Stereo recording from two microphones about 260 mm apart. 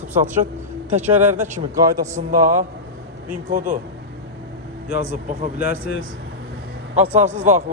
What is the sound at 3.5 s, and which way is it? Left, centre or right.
Speech, right.